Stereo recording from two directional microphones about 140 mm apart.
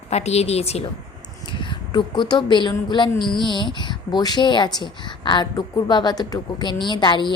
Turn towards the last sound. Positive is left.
turn(degrees=35)  # may be behind; listen again after turning